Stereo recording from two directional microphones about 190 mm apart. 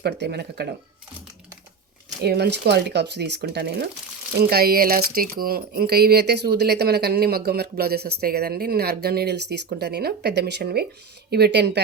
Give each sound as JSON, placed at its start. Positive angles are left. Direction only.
{"t": 0.0, "sound": "speech", "side_deg": -60}
{"t": 2.2, "sound": "speech", "side_deg": -60}